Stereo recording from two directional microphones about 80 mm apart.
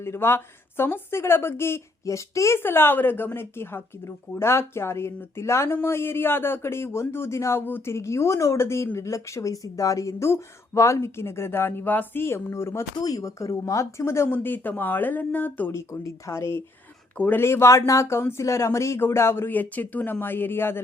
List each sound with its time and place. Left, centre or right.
0.0 s speech: left
2.6 s speech: left
13.0 s speech: left
14.0 s speech: left
15.7 s speech: left
17.2 s speech: centre
17.4 s speech: left